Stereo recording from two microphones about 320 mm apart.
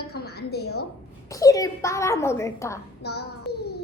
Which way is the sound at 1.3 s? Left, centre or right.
Centre.